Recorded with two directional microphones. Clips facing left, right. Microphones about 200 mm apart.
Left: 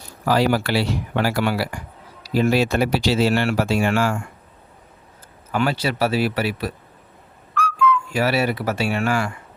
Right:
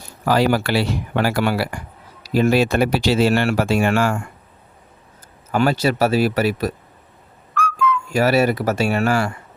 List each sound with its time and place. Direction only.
0.3 s speech: 55° right (ahead or behind)
5.5 s speech: 45° right (ahead or behind)